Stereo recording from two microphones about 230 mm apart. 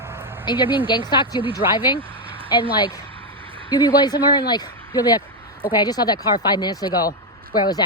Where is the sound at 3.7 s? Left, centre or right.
Centre.